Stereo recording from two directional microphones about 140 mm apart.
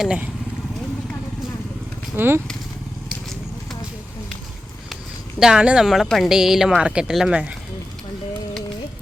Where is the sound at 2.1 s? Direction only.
15° right (ahead or behind).